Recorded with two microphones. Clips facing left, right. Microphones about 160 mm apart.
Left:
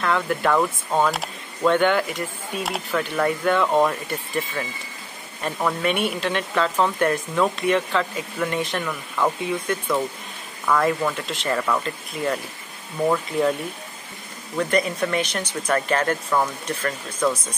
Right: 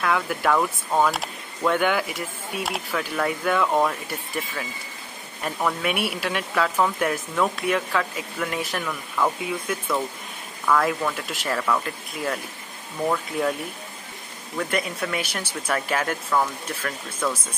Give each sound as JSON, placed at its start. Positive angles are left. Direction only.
{"t": 0.0, "sound": "speech", "side_deg": -5}
{"t": 14.6, "sound": "speech", "side_deg": -5}